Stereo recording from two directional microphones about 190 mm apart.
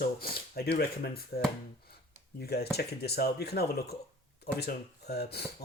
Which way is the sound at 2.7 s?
55° left (ahead or behind).